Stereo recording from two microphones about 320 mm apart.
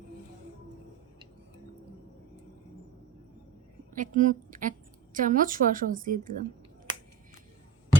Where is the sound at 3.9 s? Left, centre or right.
Right.